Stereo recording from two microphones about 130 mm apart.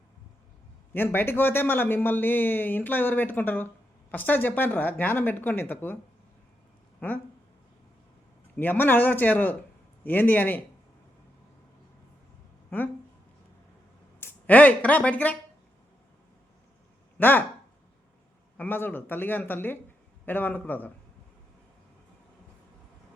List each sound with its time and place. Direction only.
0.9 s speech: 15° left (ahead or behind)
8.5 s speech: 15° left (ahead or behind)
12.7 s speech: 15° left (ahead or behind)
14.2 s speech: 15° left (ahead or behind)
17.2 s speech: 15° left (ahead or behind)
18.5 s speech: 15° left (ahead or behind)